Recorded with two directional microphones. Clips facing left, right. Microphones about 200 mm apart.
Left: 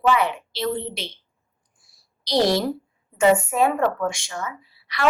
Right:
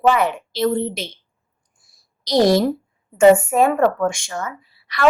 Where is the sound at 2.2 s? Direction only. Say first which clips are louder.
Right 5 dB; 45° right (ahead or behind).